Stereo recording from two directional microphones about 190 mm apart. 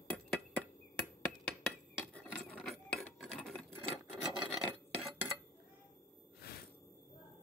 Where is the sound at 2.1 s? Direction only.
5° left (ahead or behind).